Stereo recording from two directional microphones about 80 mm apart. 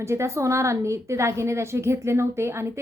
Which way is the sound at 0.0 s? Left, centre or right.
Right.